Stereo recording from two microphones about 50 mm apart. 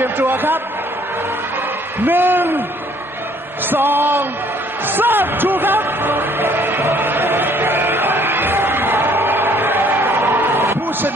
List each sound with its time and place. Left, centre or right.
0.0 s speech: right
2.0 s speech: right
3.7 s speech: right
4.8 s music: right
10.2 s a sound: right